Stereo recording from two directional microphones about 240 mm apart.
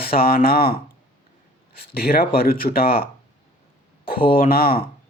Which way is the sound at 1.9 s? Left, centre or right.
Left.